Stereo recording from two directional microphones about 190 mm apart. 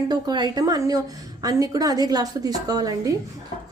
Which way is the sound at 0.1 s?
20° right (ahead or behind).